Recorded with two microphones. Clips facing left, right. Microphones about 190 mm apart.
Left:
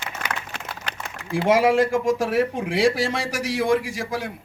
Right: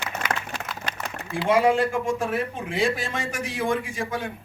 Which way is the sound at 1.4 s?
90° left.